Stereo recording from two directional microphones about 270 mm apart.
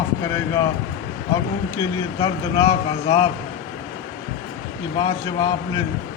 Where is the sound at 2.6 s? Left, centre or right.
Left.